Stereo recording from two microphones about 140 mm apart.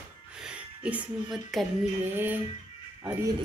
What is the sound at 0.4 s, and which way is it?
Music, 5° right (ahead or behind).